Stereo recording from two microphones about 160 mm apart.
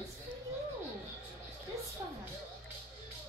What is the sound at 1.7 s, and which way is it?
Music, 20° right (ahead or behind).